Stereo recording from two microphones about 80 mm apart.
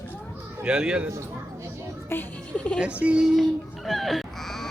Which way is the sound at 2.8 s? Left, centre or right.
Centre.